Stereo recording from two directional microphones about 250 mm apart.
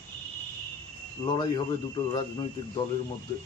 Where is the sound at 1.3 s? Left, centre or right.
Centre.